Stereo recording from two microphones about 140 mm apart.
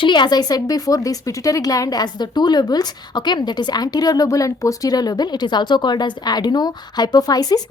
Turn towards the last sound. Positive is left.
turn(degrees=25)  # may be behind; listen again after turning